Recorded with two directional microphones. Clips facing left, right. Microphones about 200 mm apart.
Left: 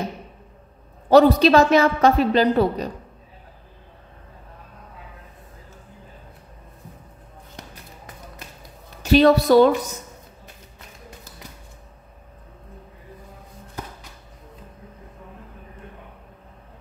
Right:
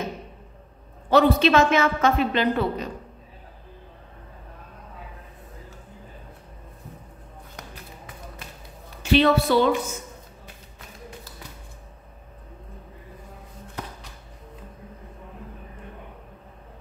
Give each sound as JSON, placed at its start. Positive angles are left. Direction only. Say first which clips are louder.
{"t": 1.1, "sound": "a woman's voice", "louder": "left 4 dB", "side_deg": 35}
{"t": 9.0, "sound": "a woman's voice", "louder": "left 4 dB", "side_deg": 40}